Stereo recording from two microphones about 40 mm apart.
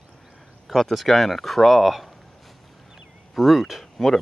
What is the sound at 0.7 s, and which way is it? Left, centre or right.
Speech, centre.